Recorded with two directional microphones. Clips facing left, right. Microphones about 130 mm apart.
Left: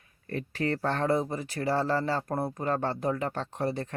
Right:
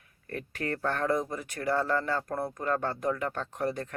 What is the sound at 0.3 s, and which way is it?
Speech, 25° left (ahead or behind).